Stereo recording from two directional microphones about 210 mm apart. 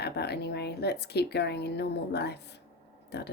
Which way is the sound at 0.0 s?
50° left (ahead or behind).